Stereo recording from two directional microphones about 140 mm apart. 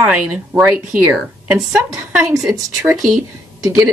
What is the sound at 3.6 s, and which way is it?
Speech, 25° right (ahead or behind).